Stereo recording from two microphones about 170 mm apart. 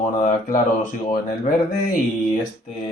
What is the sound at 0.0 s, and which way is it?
Speech, 45° left (ahead or behind).